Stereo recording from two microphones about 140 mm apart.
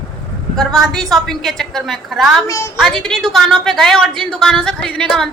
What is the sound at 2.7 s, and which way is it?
A woman's voice, centre (ahead or behind).